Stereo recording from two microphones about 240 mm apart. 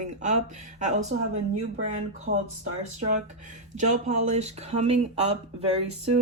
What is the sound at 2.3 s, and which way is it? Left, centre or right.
Speech, right.